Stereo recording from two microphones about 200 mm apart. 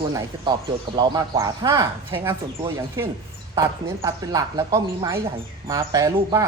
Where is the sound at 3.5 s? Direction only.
15° right (ahead or behind).